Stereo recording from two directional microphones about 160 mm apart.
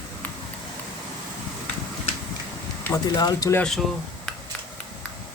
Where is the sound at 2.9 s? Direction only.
25° left (ahead or behind).